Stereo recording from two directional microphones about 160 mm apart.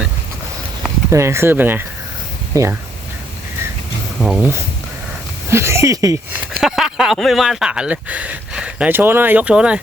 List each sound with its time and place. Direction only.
1.1 s speech: 15° right (ahead or behind)
4.2 s speech: centre (ahead or behind)
5.5 s speech: 15° right (ahead or behind)
6.6 s speech: 5° right (ahead or behind)